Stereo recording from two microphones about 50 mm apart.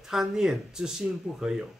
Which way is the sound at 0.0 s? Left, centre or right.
Centre.